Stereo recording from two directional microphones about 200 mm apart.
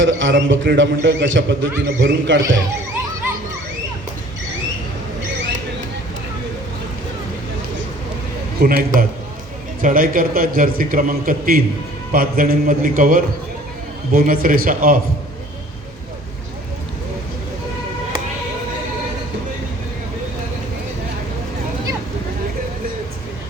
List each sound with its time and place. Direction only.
0.0 s a man's voice: 65° right (ahead or behind)
8.6 s a man's voice: 45° right (ahead or behind)